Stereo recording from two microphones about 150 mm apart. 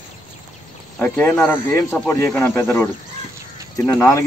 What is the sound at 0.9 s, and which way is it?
Speech, 10° left (ahead or behind).